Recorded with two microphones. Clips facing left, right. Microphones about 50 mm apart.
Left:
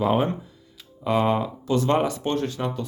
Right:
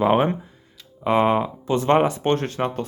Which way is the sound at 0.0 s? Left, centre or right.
Right.